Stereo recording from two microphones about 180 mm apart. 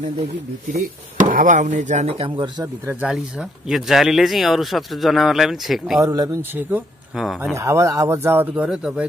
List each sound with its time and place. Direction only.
1.3 s speech: 45° right (ahead or behind); by 2.7 s 25° right (ahead or behind)
2.9 s speech: 5° right (ahead or behind)
5.9 s speech: 20° right (ahead or behind)